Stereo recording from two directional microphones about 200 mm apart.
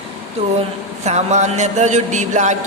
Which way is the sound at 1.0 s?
35° right (ahead or behind).